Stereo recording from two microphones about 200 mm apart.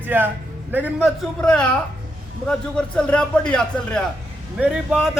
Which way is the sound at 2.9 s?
5° left (ahead or behind).